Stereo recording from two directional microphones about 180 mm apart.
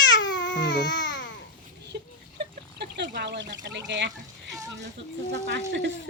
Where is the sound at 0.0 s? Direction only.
80° left.